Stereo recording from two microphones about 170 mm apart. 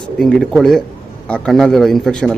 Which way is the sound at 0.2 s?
5° left (ahead or behind).